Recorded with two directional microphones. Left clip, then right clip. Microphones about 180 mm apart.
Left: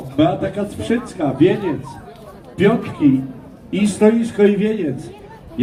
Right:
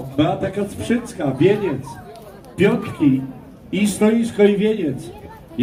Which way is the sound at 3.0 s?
25° right (ahead or behind).